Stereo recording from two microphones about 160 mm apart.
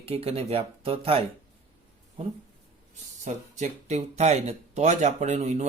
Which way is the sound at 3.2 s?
45° right (ahead or behind).